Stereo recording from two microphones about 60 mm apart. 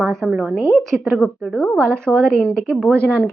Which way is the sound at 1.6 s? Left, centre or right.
Left.